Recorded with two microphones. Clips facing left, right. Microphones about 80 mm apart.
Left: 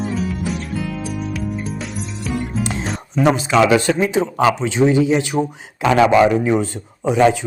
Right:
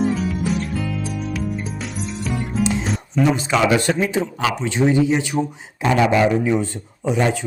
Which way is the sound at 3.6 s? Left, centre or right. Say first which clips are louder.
Left 1 dB; left.